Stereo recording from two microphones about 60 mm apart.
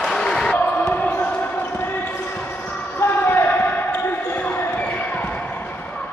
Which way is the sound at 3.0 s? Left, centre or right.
Left.